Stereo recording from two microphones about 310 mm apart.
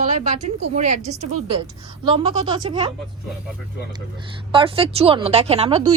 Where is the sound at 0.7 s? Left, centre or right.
Right.